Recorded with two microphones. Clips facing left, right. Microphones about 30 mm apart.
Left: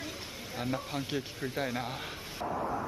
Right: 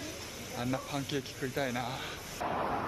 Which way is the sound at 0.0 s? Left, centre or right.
Left.